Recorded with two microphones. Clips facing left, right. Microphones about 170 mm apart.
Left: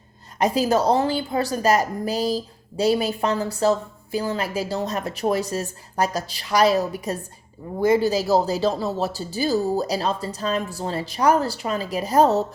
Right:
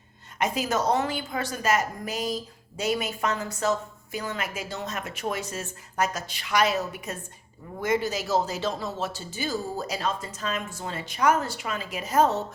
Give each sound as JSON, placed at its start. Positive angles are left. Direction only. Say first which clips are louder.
{"t": 0.3, "sound": "a woman's voice", "louder": "left 7 dB", "side_deg": 35}